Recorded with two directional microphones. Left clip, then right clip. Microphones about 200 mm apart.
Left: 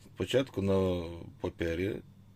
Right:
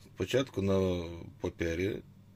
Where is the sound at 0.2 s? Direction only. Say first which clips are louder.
Left 1 dB; centre (ahead or behind).